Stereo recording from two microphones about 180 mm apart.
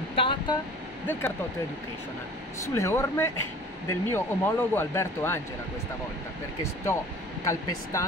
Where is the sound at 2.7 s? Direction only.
15° left (ahead or behind).